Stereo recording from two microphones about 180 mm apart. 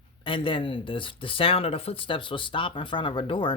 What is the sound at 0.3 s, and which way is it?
Speech, 30° left (ahead or behind).